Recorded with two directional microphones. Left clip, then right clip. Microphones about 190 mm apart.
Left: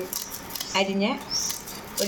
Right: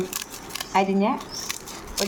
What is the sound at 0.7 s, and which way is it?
Speech, 50° right (ahead or behind).